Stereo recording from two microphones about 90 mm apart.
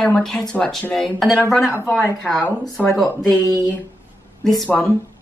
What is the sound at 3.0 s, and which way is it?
Speech, 40° left (ahead or behind).